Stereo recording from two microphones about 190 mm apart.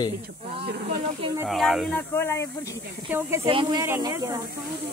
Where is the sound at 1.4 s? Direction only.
Centre (ahead or behind).